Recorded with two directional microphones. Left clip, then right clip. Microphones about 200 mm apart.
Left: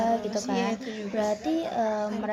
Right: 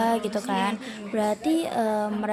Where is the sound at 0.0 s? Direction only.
20° right (ahead or behind).